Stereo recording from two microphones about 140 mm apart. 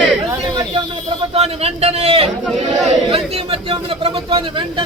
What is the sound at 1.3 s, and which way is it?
Speech, 45° right (ahead or behind).